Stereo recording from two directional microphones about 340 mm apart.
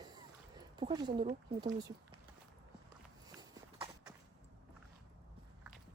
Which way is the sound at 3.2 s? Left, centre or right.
Centre.